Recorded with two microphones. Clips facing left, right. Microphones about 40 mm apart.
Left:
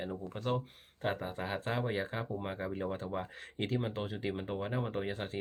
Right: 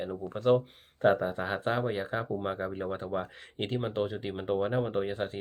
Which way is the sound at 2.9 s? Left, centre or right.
Centre.